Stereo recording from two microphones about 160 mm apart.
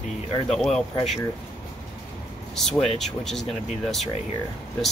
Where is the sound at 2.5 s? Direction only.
Centre (ahead or behind).